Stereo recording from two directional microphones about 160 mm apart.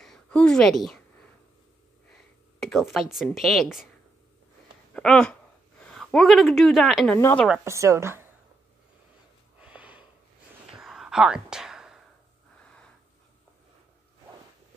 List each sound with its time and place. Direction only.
0.0 s a sound: 5° left (ahead or behind)
2.6 s speech: centre (ahead or behind)
4.9 s a woman's voice: 5° left (ahead or behind)
7.6 s speech: 20° right (ahead or behind)
9.6 s a sound: 10° right (ahead or behind)
10.7 s whispering: centre (ahead or behind)